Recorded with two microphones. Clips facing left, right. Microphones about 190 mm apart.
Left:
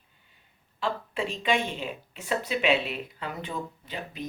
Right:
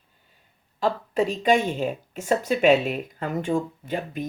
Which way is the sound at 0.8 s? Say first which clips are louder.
Right 7 dB; 40° right (ahead or behind).